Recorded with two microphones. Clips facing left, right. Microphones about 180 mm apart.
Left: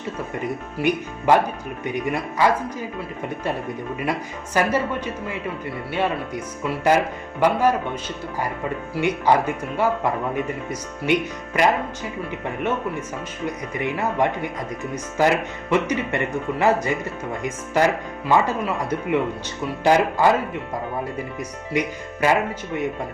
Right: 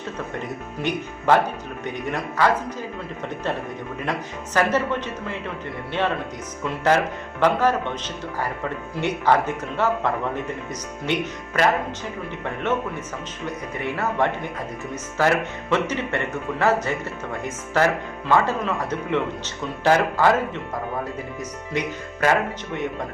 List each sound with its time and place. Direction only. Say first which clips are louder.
0.4 s speech: left 7 dB; 10° left (ahead or behind)
4.5 s speech: even; 10° left (ahead or behind)
9.0 s speech: left 1 dB; 10° left (ahead or behind)
13.4 s speech: left 3 dB; 15° left (ahead or behind)
21.7 s speech: left 3 dB; 10° left (ahead or behind)